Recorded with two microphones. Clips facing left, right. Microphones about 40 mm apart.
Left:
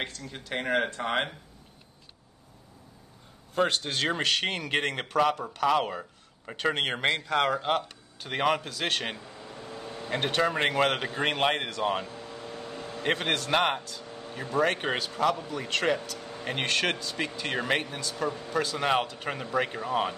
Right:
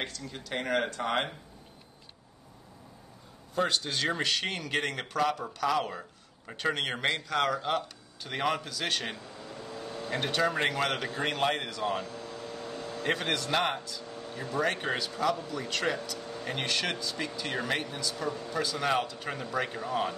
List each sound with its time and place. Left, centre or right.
0.4 s a man's voice: left
3.5 s a man's voice: left
5.9 s a sound: centre
6.5 s a man's voice: left
9.2 s a sound: centre
10.1 s a man's voice: left
11.4 s vehicle: left
13.7 s a man's voice: left
13.9 s vehicle: left
14.6 s a man's voice: left
16.2 s a sound: left
16.6 s a man's voice: left
18.1 s a man's voice: centre
18.6 s a man's voice: left